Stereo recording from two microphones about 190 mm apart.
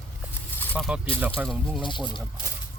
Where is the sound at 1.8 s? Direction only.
25° left (ahead or behind).